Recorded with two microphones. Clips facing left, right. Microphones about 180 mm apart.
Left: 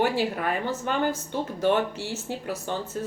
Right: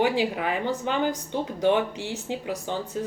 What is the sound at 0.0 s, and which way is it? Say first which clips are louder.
Speech: right 1 dB; 15° right (ahead or behind).